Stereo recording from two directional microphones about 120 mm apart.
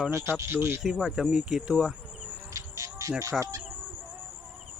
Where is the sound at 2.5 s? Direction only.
25° right (ahead or behind).